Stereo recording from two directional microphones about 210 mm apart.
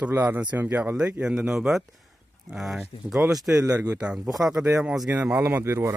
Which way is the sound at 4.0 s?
5° right (ahead or behind).